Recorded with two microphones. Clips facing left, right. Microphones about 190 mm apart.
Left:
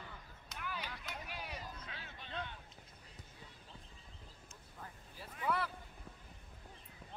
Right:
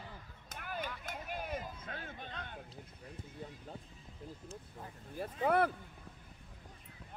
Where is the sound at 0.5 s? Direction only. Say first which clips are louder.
Right 4 dB; 50° right (ahead or behind).